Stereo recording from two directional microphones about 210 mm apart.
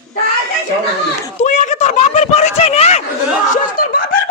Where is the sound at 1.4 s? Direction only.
35° left (ahead or behind).